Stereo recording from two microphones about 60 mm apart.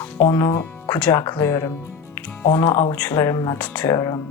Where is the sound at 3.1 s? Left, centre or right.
Left.